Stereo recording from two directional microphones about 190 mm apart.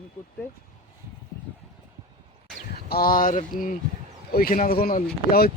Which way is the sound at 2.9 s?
50° left (ahead or behind).